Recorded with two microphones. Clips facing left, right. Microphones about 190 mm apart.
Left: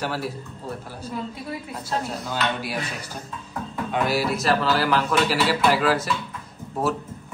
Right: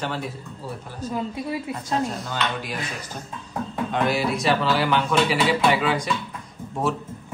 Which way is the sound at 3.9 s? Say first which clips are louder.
Even; 5° left (ahead or behind).